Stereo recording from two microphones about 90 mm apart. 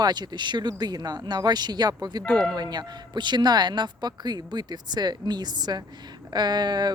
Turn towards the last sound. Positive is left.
turn(degrees=-50)  # may be behind; listen again after turning